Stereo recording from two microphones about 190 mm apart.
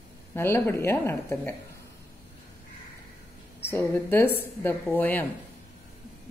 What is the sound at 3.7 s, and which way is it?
A woman's voice, 10° left (ahead or behind).